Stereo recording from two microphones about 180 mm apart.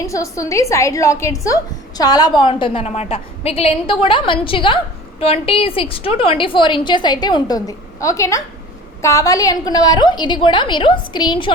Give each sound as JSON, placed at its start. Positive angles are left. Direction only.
{"t": 0.0, "sound": "a woman's voice", "side_deg": 15}